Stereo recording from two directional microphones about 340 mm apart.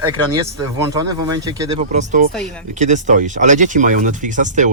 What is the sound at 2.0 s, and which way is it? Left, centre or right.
Speech, right.